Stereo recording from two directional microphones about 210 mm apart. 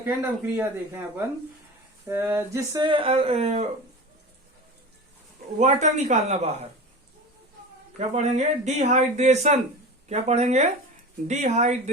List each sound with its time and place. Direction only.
0.0 s speech: 10° right (ahead or behind)
2.0 s speech: 10° right (ahead or behind); by 3.7 s 30° right (ahead or behind)
5.5 s speech: 35° right (ahead or behind)
7.9 s speech: 30° right (ahead or behind)